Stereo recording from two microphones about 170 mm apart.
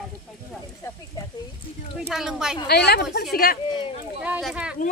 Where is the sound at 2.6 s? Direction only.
70° left (ahead or behind).